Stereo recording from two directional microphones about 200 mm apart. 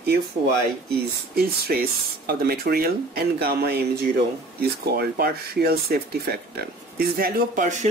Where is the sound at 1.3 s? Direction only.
50° right (ahead or behind).